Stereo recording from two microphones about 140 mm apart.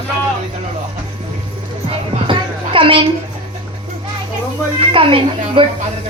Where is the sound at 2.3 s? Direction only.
40° right (ahead or behind).